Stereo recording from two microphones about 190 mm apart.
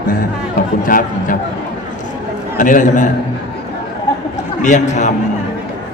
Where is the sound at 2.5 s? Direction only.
45° left (ahead or behind).